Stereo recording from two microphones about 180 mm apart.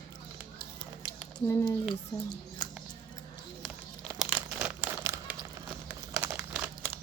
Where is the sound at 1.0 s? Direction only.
25° left (ahead or behind).